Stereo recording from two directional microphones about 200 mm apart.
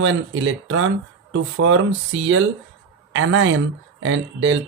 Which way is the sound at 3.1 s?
85° right.